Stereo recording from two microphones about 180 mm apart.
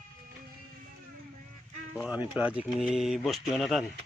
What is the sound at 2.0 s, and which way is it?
Speech, 5° right (ahead or behind).